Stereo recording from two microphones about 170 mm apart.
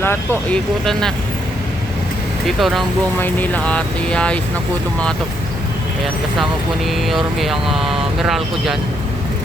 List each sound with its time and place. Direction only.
0.0 s speech: 15° left (ahead or behind)
2.6 s vehicle: centre (ahead or behind)
3.2 s speech: 10° left (ahead or behind)
6.8 s vehicle: centre (ahead or behind)